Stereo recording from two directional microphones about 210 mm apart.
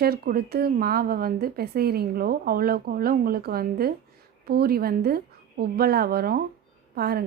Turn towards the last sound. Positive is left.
turn(degrees=-45)  # may be behind; listen again after turning